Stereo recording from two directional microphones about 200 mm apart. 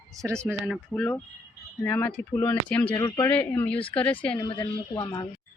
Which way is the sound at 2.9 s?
20° left (ahead or behind).